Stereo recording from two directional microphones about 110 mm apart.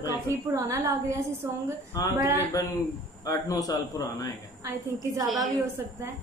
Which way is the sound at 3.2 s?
35° left (ahead or behind).